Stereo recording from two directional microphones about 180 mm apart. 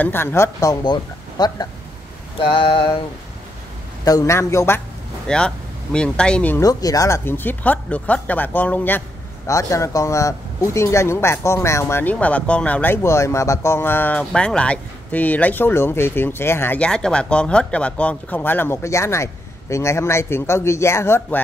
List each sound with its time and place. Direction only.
0.0 s speech: 10° left (ahead or behind)
1.4 s mantra: 25° left (ahead or behind)
4.0 s speech: 20° left (ahead or behind)